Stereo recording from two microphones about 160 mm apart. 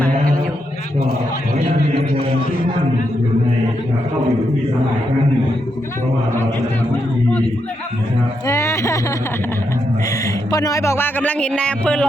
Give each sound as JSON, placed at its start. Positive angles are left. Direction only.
{"t": 8.4, "sound": "speech", "side_deg": 20}
{"t": 10.2, "sound": "speech", "side_deg": 20}